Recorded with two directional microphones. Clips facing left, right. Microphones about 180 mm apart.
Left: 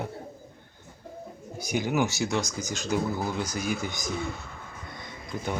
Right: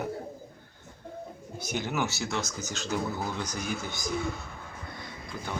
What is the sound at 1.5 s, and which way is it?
Speech, 10° left (ahead or behind).